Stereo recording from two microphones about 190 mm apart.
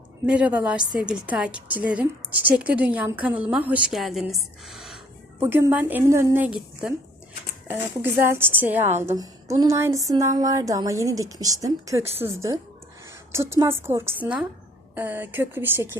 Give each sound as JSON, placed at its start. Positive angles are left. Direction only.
{"t": 0.3, "sound": "a woman's voice", "side_deg": -5}